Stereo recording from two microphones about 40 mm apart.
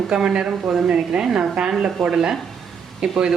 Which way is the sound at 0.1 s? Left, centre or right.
Centre.